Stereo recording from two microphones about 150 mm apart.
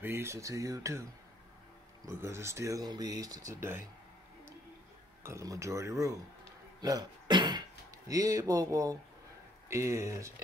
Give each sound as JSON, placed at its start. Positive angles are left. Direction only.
{"t": 0.0, "sound": "speech", "side_deg": -15}
{"t": 2.0, "sound": "speech", "side_deg": -20}
{"t": 5.2, "sound": "speech", "side_deg": -20}
{"t": 6.8, "sound": "music", "side_deg": -25}
{"t": 8.1, "sound": "speech", "side_deg": -25}